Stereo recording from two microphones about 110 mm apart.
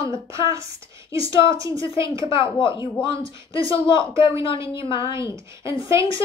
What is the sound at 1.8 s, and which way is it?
A woman's voice, 50° left (ahead or behind).